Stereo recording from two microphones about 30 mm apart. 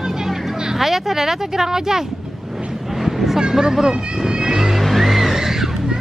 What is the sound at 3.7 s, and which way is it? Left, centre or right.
Speech, centre.